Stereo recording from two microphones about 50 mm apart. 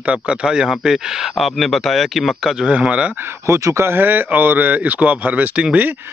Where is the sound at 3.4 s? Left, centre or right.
Right.